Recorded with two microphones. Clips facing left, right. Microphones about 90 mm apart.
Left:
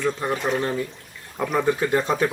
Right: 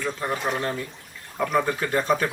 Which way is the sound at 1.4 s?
15° left (ahead or behind).